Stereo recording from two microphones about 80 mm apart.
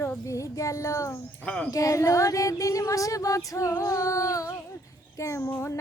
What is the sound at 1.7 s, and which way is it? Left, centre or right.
Female singing, left.